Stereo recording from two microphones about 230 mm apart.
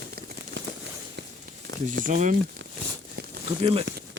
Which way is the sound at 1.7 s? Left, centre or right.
Right.